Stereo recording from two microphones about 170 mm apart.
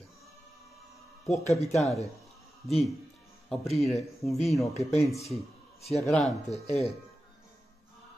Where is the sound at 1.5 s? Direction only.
Centre (ahead or behind).